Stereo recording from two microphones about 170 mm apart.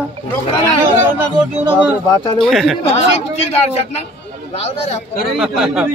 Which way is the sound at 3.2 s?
40° left (ahead or behind).